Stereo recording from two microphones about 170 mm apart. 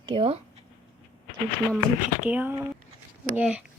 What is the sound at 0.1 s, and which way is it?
Speech, 35° right (ahead or behind).